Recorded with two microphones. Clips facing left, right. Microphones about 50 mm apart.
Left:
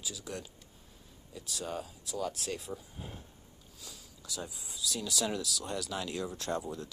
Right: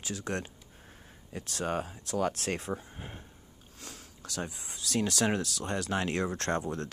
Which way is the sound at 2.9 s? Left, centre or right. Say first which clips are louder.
Right 1 dB; right.